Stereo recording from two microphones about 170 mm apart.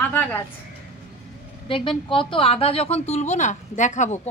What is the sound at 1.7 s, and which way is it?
A woman's voice, 30° left (ahead or behind).